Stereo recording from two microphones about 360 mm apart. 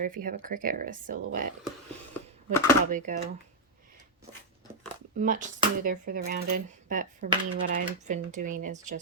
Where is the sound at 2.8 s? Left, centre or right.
Right.